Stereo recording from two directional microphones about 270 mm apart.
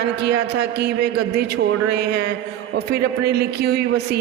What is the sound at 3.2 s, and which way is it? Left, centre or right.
Speech, right.